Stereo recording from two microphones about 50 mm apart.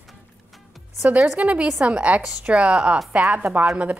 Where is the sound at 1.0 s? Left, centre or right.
Right.